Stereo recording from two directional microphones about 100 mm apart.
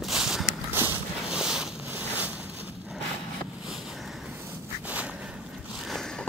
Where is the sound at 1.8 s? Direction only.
20° right (ahead or behind).